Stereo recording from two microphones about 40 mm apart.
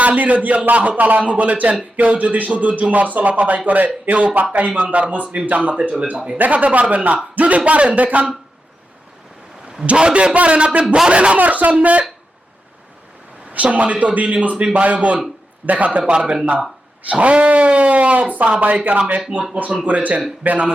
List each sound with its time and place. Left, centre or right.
0.0 s a man's voice: right
9.8 s a man's voice: right
10.8 s speech: centre
11.1 s speech: right
11.3 s a man's voice: right
13.5 s a man's voice: right
16.1 s speech: right
17.1 s a man's voice: right